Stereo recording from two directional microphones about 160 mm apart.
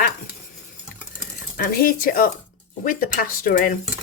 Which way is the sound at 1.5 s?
65° left (ahead or behind).